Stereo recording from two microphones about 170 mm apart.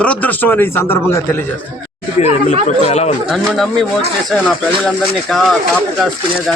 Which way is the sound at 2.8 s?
40° left (ahead or behind).